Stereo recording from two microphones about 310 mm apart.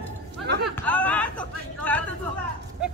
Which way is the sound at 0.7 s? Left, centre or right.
Centre.